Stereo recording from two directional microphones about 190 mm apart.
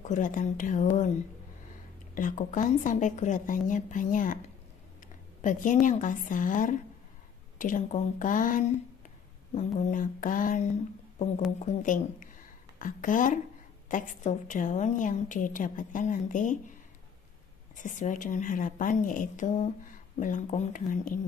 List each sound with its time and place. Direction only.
0.0 s speech: 40° left (ahead or behind)
2.1 s a woman's voice: 45° left (ahead or behind)
11.6 s a woman's voice: 45° left (ahead or behind)
17.8 s a woman's voice: 40° left (ahead or behind)